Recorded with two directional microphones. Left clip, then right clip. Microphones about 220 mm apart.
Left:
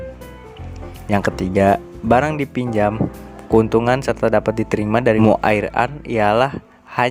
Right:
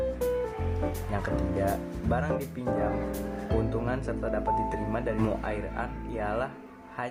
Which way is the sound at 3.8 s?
45° left (ahead or behind).